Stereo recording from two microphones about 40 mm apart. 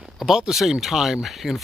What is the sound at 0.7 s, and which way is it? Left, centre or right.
Speech, centre.